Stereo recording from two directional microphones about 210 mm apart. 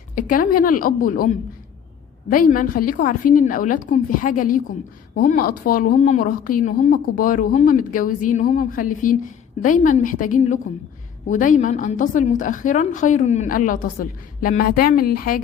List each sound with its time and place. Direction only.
0.2 s a woman's voice: 40° left (ahead or behind)